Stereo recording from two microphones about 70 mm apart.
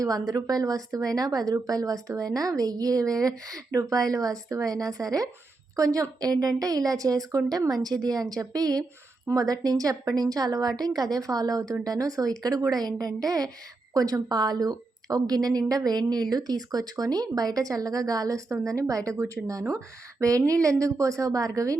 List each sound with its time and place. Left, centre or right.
0.0 s a woman's voice: right